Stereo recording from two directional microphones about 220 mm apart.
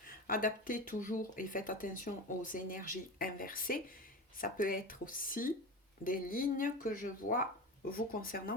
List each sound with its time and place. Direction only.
0.0 s speech: 40° left (ahead or behind)